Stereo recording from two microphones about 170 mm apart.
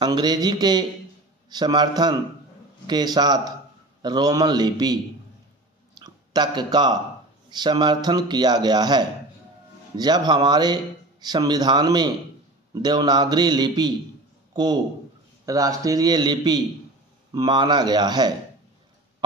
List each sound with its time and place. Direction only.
0.0 s speech: 25° right (ahead or behind)
5.9 s a sound: 25° right (ahead or behind)
7.4 s a man's voice: 25° right (ahead or behind)